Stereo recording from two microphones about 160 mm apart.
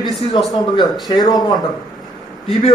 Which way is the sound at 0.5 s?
25° left (ahead or behind).